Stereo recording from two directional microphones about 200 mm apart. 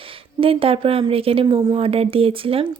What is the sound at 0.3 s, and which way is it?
Speech, 25° right (ahead or behind).